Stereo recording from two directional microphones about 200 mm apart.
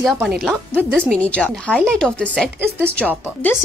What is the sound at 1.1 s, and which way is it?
A woman's voice, 5° left (ahead or behind).